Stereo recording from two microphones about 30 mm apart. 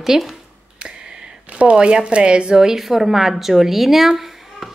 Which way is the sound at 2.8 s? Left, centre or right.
Centre.